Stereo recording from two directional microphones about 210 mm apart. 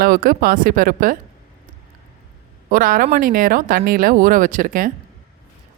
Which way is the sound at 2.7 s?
40° right (ahead or behind).